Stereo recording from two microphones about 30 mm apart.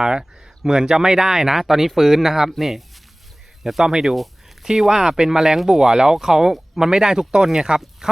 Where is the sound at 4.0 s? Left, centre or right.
Centre.